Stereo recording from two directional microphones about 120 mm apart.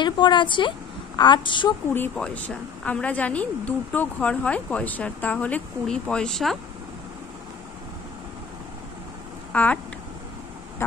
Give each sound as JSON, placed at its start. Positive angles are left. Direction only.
{"t": 0.0, "sound": "a woman's voice", "side_deg": 40}
{"t": 2.1, "sound": "a woman's voice", "side_deg": 10}
{"t": 9.5, "sound": "a sound", "side_deg": 10}